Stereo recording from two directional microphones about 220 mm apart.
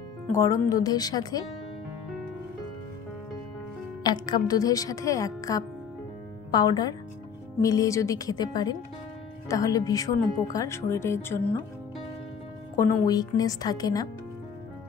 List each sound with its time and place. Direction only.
0.3 s a woman's voice: 15° left (ahead or behind)
4.0 s a woman's voice: 20° left (ahead or behind)
12.7 s a woman's voice: 15° left (ahead or behind)